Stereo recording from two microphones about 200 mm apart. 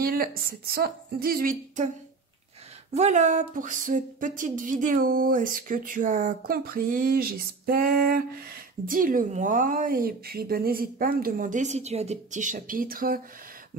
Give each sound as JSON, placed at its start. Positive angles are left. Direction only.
{"t": 0.0, "sound": "speech", "side_deg": -45}
{"t": 2.9, "sound": "speech", "side_deg": -35}